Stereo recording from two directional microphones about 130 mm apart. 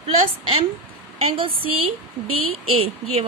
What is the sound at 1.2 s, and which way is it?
Speech, 45° right (ahead or behind).